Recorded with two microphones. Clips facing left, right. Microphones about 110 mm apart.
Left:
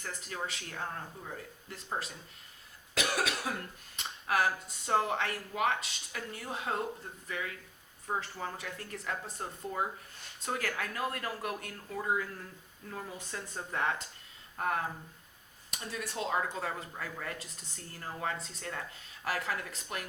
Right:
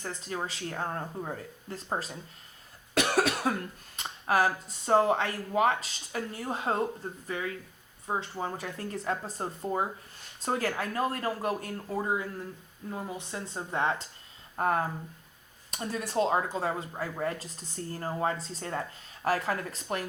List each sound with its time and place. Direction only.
0.0 s speech: 35° right (ahead or behind)
2.9 s cough: 55° right (ahead or behind)
3.9 s a sound: 35° right (ahead or behind)
4.9 s speech: 35° right (ahead or behind)
8.5 s speech: 35° right (ahead or behind)